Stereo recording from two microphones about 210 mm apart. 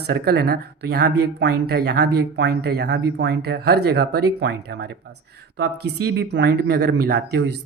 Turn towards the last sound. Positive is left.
turn(degrees=-55)  # may be behind; listen again after turning